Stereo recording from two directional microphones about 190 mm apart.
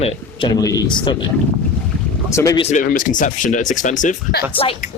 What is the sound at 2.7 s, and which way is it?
Speech, 45° left (ahead or behind).